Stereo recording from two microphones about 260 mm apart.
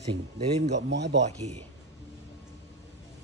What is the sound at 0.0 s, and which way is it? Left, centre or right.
Speech, right.